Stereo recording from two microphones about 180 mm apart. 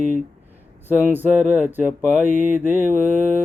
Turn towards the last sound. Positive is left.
turn(degrees=-10)  # may be behind; listen again after turning